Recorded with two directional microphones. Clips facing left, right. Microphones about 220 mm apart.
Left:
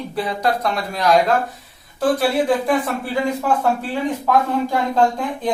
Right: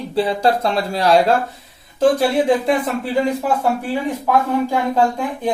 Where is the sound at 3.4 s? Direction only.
10° right (ahead or behind).